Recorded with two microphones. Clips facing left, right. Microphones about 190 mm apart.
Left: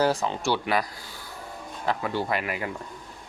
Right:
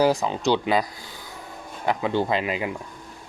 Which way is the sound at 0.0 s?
15° right (ahead or behind).